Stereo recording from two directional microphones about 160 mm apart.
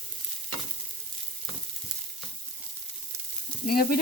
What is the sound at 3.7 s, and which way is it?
Sizzle, 70° left (ahead or behind).